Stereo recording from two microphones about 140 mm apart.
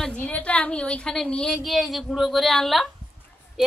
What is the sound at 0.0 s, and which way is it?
A woman's voice, 10° left (ahead or behind).